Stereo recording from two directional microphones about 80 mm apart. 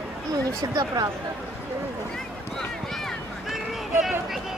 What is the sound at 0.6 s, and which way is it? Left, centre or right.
Speech, right.